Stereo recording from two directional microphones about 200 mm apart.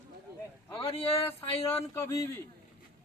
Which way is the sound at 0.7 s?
30° left (ahead or behind).